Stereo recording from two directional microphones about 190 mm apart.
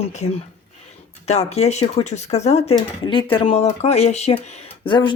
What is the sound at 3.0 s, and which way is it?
Speech, 25° left (ahead or behind).